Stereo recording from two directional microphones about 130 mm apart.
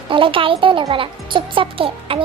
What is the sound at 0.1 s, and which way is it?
Speech, 40° right (ahead or behind).